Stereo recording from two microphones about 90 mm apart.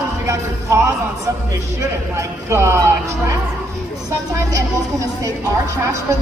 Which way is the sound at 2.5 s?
30° right (ahead or behind).